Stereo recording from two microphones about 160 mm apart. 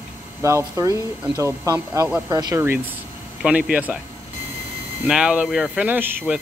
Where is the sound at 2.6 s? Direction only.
10° right (ahead or behind).